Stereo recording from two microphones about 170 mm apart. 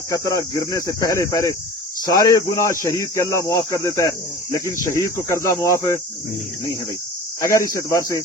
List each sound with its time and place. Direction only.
0.1 s speech: 20° left (ahead or behind)
7.8 s speech: 20° left (ahead or behind)